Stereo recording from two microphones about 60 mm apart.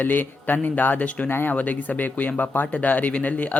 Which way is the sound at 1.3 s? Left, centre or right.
Left.